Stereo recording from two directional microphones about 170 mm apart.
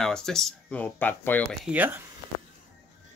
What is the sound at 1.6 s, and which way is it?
Speech, 10° right (ahead or behind).